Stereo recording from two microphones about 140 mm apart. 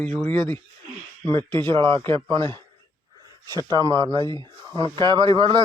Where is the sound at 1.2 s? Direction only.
35° right (ahead or behind).